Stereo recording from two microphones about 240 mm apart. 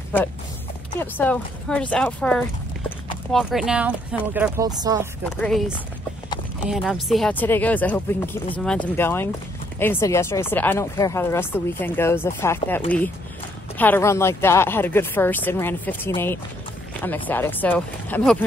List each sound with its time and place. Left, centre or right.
0.9 s speech: centre
5.4 s speech: centre